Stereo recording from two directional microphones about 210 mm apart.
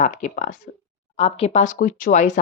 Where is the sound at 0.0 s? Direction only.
35° left (ahead or behind).